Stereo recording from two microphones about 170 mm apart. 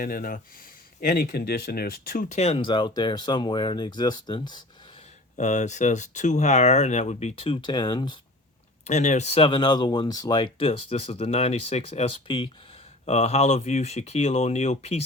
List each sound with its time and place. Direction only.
0.0 s speech: 60° left (ahead or behind)
2.3 s speech: 40° left (ahead or behind)
5.4 s speech: 45° left (ahead or behind); by 8.2 s 25° left (ahead or behind)
8.8 s speech: 40° left (ahead or behind)